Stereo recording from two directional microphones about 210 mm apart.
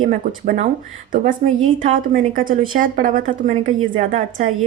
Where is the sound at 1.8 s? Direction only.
40° right (ahead or behind).